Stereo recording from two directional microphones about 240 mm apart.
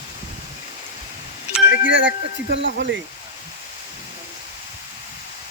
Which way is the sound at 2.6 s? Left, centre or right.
Right.